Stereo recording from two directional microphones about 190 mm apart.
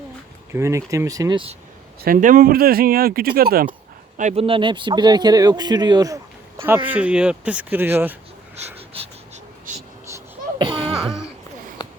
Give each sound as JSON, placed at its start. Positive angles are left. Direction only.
{"t": 0.5, "sound": "speech", "side_deg": -15}
{"t": 2.0, "sound": "speech", "side_deg": -45}
{"t": 4.2, "sound": "a man's voice", "side_deg": -35}
{"t": 8.9, "sound": "a sound", "side_deg": -35}